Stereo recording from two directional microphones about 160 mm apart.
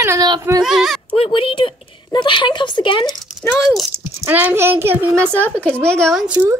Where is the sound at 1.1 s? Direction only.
35° left (ahead or behind).